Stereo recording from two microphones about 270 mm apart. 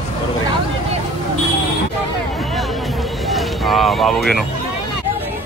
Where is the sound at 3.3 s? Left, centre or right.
Centre.